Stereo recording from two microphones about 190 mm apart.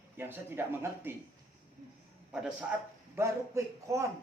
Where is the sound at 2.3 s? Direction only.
5° right (ahead or behind).